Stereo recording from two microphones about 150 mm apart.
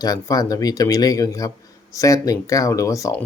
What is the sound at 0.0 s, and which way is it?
A man's voice, 25° left (ahead or behind).